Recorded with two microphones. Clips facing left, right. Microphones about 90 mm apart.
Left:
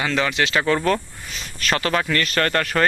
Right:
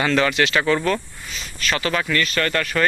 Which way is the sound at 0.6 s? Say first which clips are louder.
Even; 35° left (ahead or behind).